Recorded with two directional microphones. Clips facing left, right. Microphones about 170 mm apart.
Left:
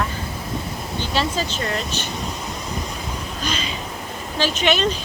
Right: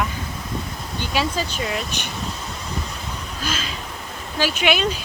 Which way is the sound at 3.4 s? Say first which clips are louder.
Left 1 dB; 5° right (ahead or behind).